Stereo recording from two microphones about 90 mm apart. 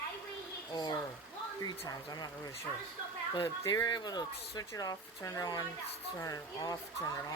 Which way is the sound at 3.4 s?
45° left (ahead or behind).